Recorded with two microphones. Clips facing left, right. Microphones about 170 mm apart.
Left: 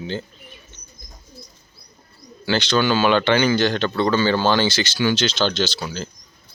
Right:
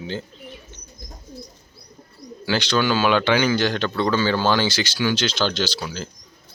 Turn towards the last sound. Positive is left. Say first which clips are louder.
# left 2 dB
turn(degrees=-10)  # may be behind; listen again after turning